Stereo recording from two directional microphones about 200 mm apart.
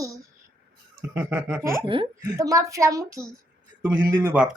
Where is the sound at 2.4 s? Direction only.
15° right (ahead or behind).